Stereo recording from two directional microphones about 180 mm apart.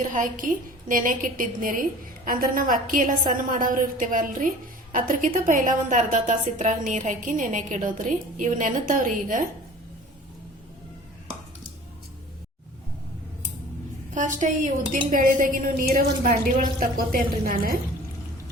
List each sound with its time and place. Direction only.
0.1 s a woman's voice: 45° right (ahead or behind)
14.1 s a woman's voice: 45° right (ahead or behind)